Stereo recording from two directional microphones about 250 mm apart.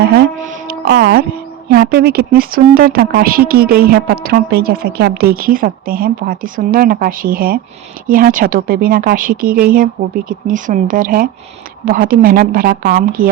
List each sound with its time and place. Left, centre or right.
0.0 s speech: right